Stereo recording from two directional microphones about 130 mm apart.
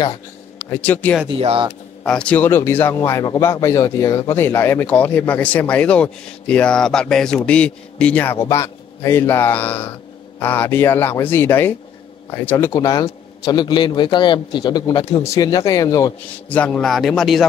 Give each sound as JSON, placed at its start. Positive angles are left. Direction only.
{"t": 0.7, "sound": "speech", "side_deg": 10}
{"t": 1.4, "sound": "speech", "side_deg": -45}
{"t": 2.0, "sound": "speech", "side_deg": 10}
{"t": 12.7, "sound": "a man's voice", "side_deg": 30}
{"t": 16.4, "sound": "speech", "side_deg": 10}